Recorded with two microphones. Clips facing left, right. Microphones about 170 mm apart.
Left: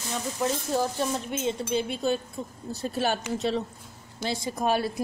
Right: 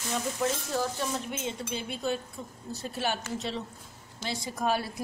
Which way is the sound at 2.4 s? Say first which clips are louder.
Left 5 dB; 30° left (ahead or behind).